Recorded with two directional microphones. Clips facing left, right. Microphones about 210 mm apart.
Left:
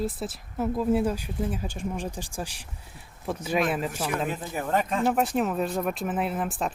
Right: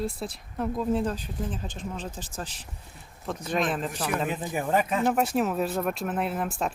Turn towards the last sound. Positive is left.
turn(degrees=0)  # may be behind; listen again after turning